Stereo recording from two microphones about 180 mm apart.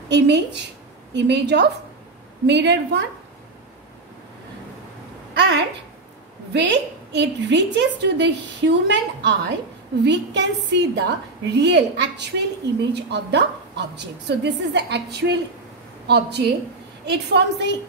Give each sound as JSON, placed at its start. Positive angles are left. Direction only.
{"t": 0.1, "sound": "a woman's voice", "side_deg": -70}
{"t": 5.4, "sound": "a woman's voice", "side_deg": -75}